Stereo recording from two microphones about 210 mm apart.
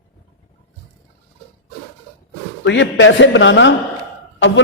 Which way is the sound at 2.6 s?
60° left (ahead or behind).